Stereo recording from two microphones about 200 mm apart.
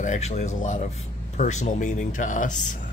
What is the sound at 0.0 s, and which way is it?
Speech, 35° left (ahead or behind).